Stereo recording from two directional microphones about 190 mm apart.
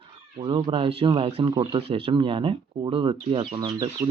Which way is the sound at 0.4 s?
25° right (ahead or behind).